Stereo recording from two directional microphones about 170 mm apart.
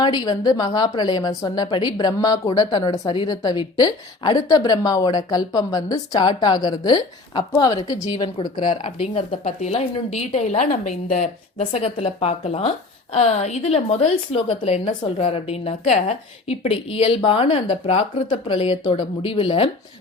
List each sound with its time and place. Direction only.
0.0 s a woman's voice: 25° left (ahead or behind)